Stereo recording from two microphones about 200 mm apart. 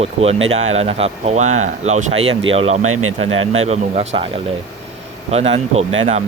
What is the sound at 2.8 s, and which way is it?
Speech, 90° right.